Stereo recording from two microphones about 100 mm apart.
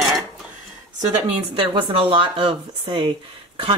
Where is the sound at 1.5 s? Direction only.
60° right (ahead or behind).